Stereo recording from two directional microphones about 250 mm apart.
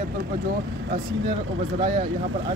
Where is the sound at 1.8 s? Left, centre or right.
Right.